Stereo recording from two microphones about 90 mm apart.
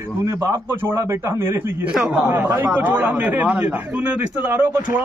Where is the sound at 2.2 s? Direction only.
20° right (ahead or behind).